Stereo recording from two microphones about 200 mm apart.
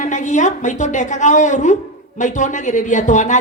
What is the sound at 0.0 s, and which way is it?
A woman's voice, 35° left (ahead or behind).